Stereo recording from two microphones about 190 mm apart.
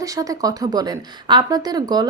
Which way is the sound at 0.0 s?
20° right (ahead or behind).